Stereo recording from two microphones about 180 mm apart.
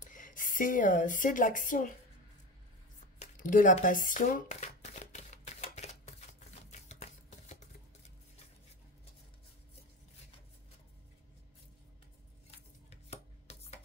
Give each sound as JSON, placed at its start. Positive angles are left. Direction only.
{"t": 0.0, "sound": "speech", "side_deg": 45}
{"t": 3.2, "sound": "crumpling", "side_deg": 45}
{"t": 12.4, "sound": "chopping", "side_deg": 35}